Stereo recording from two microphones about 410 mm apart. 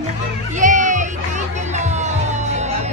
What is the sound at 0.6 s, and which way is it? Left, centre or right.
Music, centre.